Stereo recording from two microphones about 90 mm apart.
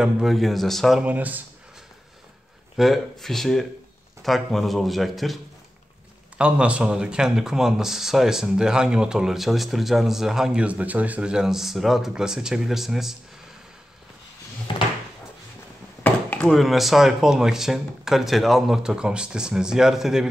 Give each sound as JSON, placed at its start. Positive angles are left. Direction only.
{"t": 0.0, "sound": "speech", "side_deg": 0}
{"t": 1.0, "sound": "speech", "side_deg": -20}
{"t": 2.8, "sound": "speech", "side_deg": 0}
{"t": 6.3, "sound": "speech", "side_deg": -15}
{"t": 14.7, "sound": "drawer open or close", "side_deg": 65}
{"t": 16.0, "sound": "chop", "side_deg": 20}
{"t": 16.4, "sound": "speech", "side_deg": 0}